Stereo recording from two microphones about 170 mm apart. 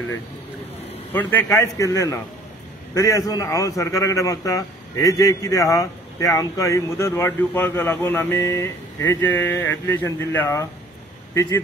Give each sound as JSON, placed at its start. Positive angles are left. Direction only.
{"t": 1.1, "sound": "a man's voice", "side_deg": 15}